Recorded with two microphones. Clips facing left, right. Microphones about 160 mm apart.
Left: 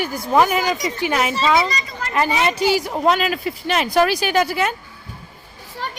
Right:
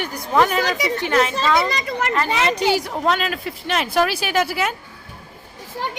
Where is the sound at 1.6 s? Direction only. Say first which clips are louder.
Right 4 dB; 60° right (ahead or behind).